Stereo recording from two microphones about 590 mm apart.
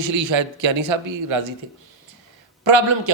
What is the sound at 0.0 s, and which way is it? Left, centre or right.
A man's voice, right.